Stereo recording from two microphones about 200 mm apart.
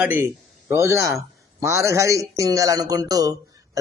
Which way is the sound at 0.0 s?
10° right (ahead or behind).